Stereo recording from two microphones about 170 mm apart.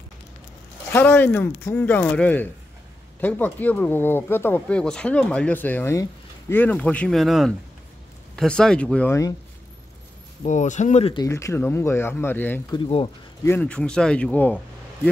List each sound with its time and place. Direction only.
0.9 s speech: 10° left (ahead or behind)
10.4 s speech: 45° left (ahead or behind)
11.1 s speech: 15° left (ahead or behind)